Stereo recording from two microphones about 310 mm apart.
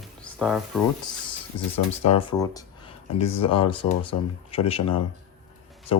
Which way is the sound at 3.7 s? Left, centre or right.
Centre.